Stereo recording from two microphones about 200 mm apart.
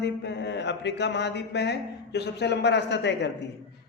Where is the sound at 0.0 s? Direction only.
60° left (ahead or behind).